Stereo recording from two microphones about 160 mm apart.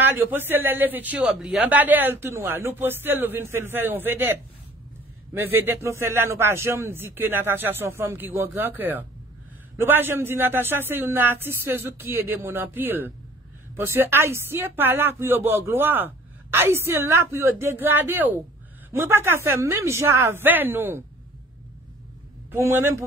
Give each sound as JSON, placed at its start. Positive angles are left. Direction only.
{"t": 0.0, "sound": "speech", "side_deg": -15}
{"t": 22.5, "sound": "speech", "side_deg": -15}